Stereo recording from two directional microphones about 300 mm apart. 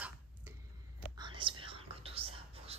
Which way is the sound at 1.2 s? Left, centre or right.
Centre.